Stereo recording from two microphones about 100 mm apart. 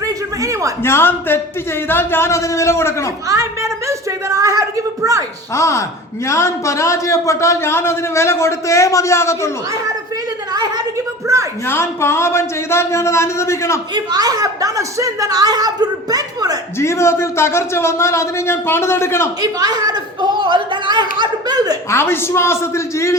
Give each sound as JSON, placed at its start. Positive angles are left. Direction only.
{"t": 0.0, "sound": "a sound", "side_deg": -35}
{"t": 0.8, "sound": "a man's voice", "side_deg": 25}
{"t": 3.2, "sound": "a sound", "side_deg": -30}
{"t": 5.5, "sound": "a man's voice", "side_deg": 30}
{"t": 11.6, "sound": "a man's voice", "side_deg": 25}
{"t": 13.9, "sound": "a woman's voice", "side_deg": -40}
{"t": 16.7, "sound": "a man's voice", "side_deg": 25}
{"t": 19.4, "sound": "speech", "side_deg": -40}
{"t": 21.8, "sound": "a man's voice", "side_deg": 25}